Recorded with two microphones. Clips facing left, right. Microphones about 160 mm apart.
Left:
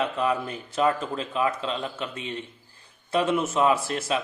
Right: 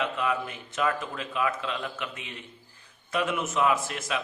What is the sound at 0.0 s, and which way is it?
A man's voice, 35° left (ahead or behind).